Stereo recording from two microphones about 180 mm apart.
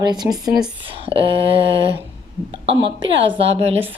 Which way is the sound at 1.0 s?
30° right (ahead or behind).